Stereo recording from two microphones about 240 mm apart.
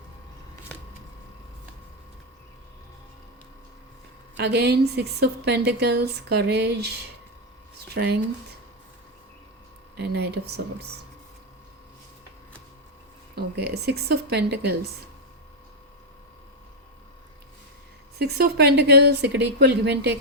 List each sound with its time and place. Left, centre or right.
4.4 s a woman's voice: right
10.0 s a woman's voice: right
13.3 s a woman's voice: right
18.2 s a woman's voice: right